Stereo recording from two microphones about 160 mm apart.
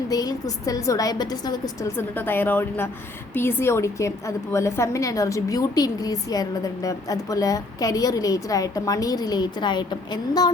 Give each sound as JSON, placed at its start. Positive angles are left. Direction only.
{"t": 0.1, "sound": "a woman's voice", "side_deg": 25}